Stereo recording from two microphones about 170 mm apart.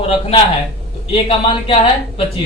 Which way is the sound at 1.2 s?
35° left (ahead or behind).